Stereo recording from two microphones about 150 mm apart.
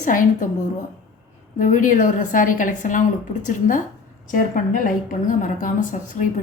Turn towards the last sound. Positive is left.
turn(degrees=60)  # may be behind; listen again after turning